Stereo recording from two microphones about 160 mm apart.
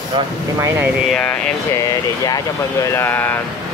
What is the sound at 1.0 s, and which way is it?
Speech, 5° left (ahead or behind).